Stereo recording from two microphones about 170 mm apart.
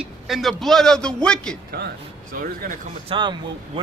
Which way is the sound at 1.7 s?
65° right (ahead or behind).